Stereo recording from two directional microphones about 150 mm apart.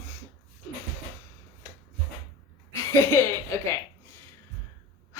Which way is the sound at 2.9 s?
15° left (ahead or behind).